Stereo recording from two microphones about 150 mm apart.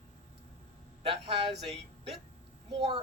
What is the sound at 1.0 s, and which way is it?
Speech, 40° right (ahead or behind).